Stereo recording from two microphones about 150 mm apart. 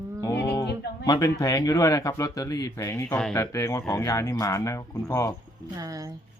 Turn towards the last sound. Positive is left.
turn(degrees=-25)  # may be behind; listen again after turning